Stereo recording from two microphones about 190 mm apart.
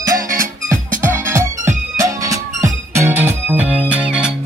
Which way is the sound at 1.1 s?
15° right (ahead or behind).